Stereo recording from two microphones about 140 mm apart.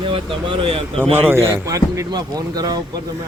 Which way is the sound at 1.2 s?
20° right (ahead or behind).